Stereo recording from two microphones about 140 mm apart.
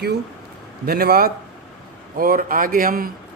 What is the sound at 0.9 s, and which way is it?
A man's voice, 90° right.